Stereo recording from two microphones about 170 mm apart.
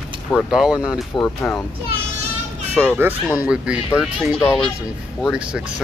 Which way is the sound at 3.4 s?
5° right (ahead or behind).